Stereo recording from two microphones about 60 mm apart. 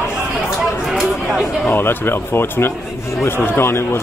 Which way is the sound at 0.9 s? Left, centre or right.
Centre.